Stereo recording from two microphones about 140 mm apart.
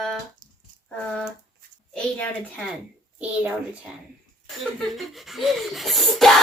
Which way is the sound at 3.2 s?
10° right (ahead or behind).